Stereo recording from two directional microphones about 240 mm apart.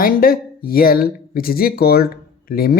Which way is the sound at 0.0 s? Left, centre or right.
Left.